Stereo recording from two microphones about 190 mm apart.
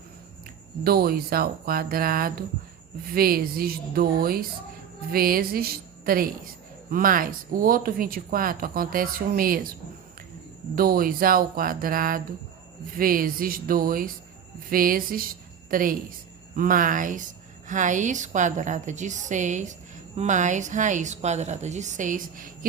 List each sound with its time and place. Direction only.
0.9 s speech: 55° right (ahead or behind)
10.8 s a woman's voice: 50° right (ahead or behind)